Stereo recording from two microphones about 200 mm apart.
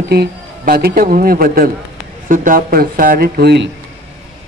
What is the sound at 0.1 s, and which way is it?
A man's voice, 50° right (ahead or behind).